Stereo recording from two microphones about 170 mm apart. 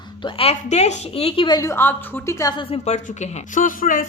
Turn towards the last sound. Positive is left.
turn(degrees=55)  # may be behind; listen again after turning